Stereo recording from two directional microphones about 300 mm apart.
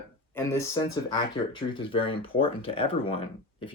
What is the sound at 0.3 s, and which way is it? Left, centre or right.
Speech, centre.